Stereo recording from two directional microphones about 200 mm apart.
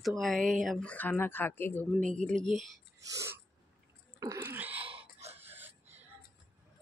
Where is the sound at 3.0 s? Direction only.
15° right (ahead or behind).